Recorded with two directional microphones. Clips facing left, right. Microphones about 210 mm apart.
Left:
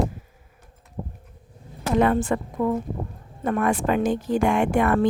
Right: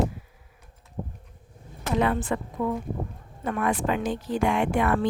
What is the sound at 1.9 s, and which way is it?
Speech, 45° left (ahead or behind).